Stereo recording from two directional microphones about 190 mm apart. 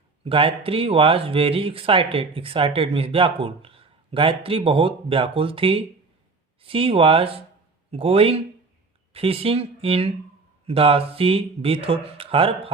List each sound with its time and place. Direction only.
0.3 s speech: 30° right (ahead or behind)